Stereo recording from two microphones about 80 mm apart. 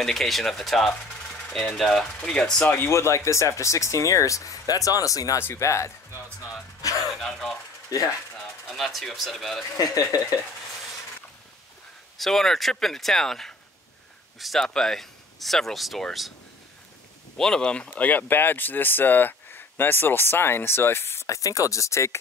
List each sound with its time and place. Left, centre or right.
0.0 s speech: centre
2.7 s speech: left
5.4 s speech: left
6.8 s a sound: left
7.1 s throat clearing: centre
8.6 s speech: centre
9.8 s speech: left
12.2 s speech: centre
17.4 s speech: centre; by 22.1 s left